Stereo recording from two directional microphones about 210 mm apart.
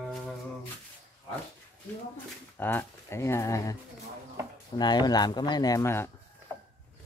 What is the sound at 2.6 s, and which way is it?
Speech, 10° left (ahead or behind).